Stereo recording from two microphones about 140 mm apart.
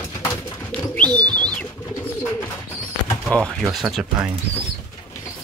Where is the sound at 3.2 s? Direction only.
5° left (ahead or behind).